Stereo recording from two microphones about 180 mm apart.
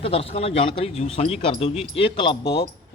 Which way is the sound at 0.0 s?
30° left (ahead or behind).